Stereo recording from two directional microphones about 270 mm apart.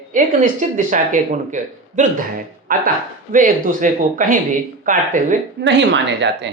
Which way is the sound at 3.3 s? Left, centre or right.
Right.